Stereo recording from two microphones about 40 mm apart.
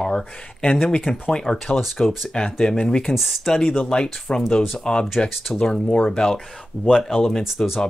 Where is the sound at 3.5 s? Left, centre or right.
Centre.